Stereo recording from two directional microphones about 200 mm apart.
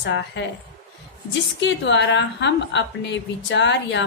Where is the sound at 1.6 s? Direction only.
60° left (ahead or behind).